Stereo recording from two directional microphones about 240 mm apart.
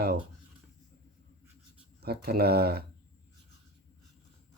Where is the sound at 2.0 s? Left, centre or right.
Right.